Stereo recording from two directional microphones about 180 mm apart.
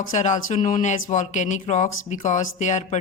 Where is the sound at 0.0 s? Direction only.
45° left (ahead or behind).